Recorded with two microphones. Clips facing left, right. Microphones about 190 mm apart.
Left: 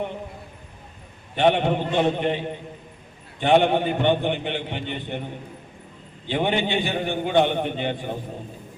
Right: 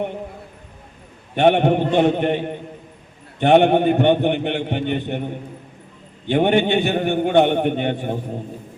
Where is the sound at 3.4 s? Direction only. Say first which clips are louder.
Right 5 dB; 50° right (ahead or behind).